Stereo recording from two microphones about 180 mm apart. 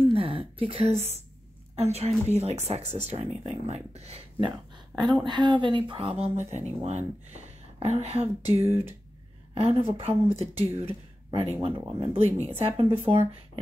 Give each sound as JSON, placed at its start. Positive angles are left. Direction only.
{"t": 0.1, "sound": "a sound", "side_deg": -30}
{"t": 1.8, "sound": "speech", "side_deg": -35}
{"t": 8.5, "sound": "speech", "side_deg": -15}
{"t": 9.5, "sound": "speech", "side_deg": -30}